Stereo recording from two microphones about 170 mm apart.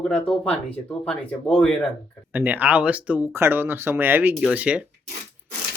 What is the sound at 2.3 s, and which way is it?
Speech, 10° right (ahead or behind).